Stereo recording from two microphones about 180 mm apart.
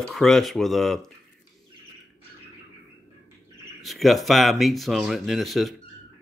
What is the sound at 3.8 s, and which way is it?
Speech, centre (ahead or behind).